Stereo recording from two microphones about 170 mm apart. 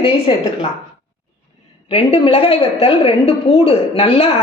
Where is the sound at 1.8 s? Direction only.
35° left (ahead or behind).